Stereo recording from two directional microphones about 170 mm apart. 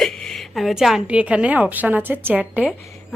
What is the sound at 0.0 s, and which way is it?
A woman's voice, 5° left (ahead or behind).